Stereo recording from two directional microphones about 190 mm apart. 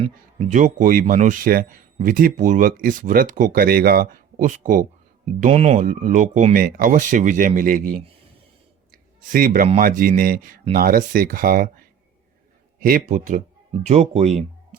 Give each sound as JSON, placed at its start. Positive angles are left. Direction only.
{"t": 0.0, "sound": "speech", "side_deg": -35}
{"t": 9.3, "sound": "speech", "side_deg": -45}
{"t": 12.8, "sound": "speech", "side_deg": -45}